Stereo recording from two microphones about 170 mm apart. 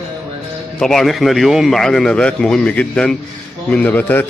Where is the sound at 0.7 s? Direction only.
Centre (ahead or behind).